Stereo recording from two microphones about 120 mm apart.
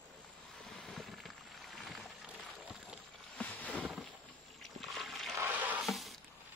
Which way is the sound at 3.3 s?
10° left (ahead or behind).